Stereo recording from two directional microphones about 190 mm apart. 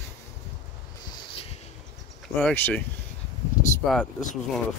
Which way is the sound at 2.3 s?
10° left (ahead or behind).